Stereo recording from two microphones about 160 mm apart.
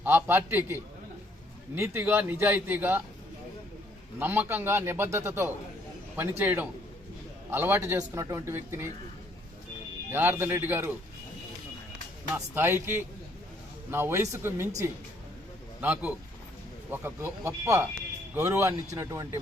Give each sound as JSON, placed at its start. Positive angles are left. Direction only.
{"t": 0.0, "sound": "a man's voice", "side_deg": -15}
{"t": 4.2, "sound": "a man's voice", "side_deg": -10}
{"t": 10.1, "sound": "a man's voice", "side_deg": -15}
{"t": 12.3, "sound": "a man's voice", "side_deg": -15}
{"t": 15.8, "sound": "a man's voice", "side_deg": -10}